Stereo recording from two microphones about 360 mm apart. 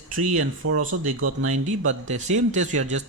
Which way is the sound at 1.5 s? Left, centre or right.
Centre.